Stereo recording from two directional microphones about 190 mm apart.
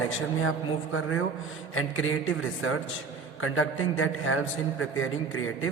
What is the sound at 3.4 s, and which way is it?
A man's voice, 90° left.